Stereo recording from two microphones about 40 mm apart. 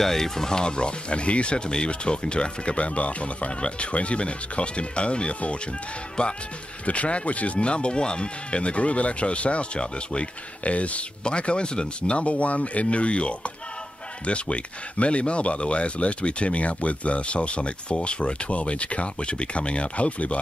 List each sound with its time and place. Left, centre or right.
0.0 s speech: centre; by 5.6 s left
6.9 s speech: left